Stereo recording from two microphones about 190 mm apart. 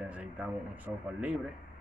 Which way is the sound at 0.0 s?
5° right (ahead or behind).